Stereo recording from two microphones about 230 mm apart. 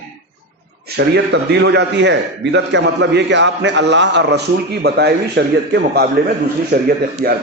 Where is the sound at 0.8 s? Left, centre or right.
Right.